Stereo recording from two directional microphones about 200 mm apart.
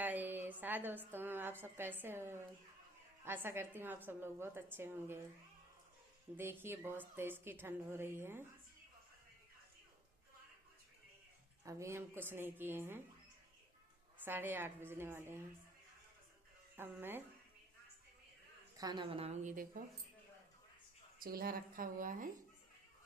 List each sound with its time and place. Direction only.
0.0 s a woman's voice: 10° right (ahead or behind)
6.3 s a woman's voice: 10° right (ahead or behind)
11.6 s a woman's voice: 15° right (ahead or behind)
14.3 s a woman's voice: 10° right (ahead or behind)
16.7 s a woman's voice: 10° right (ahead or behind)
18.8 s a woman's voice: 20° right (ahead or behind); by 19.8 s 40° right (ahead or behind)
21.2 s speech: 45° right (ahead or behind)